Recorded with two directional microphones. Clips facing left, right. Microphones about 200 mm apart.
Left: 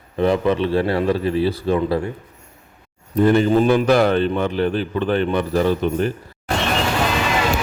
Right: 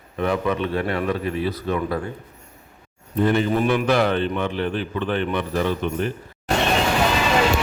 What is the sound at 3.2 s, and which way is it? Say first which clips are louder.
A man's voice: left 5 dB; 35° left (ahead or behind).